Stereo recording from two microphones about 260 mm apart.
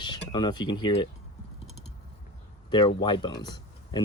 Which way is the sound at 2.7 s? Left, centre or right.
Centre.